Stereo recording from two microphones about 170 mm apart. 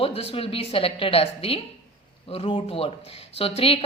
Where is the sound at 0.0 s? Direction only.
35° left (ahead or behind).